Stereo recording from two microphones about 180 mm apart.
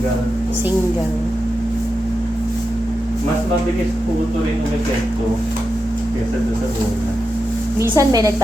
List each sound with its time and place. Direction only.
7.8 s a woman's voice: 15° right (ahead or behind)